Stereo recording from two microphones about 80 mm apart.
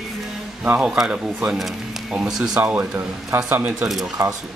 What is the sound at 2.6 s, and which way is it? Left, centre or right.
Speech, right.